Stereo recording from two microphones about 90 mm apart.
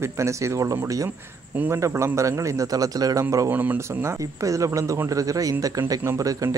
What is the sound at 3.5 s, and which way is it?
Speech, 20° right (ahead or behind).